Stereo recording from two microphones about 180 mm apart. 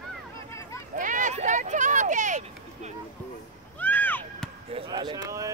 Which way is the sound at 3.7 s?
10° left (ahead or behind).